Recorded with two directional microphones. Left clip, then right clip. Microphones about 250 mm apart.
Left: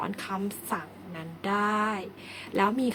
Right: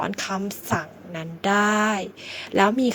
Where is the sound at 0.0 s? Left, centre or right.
Right.